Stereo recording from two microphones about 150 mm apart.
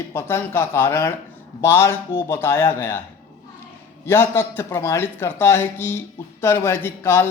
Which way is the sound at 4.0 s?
15° left (ahead or behind).